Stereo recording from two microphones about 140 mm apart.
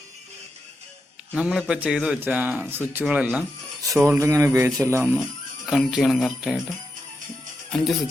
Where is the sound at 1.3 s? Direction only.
5° right (ahead or behind); by 5.1 s 20° right (ahead or behind).